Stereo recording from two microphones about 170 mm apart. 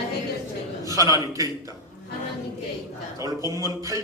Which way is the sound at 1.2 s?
20° right (ahead or behind).